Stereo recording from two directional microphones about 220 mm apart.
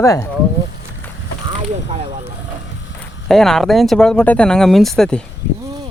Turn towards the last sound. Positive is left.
turn(degrees=5)  # may be behind; listen again after turning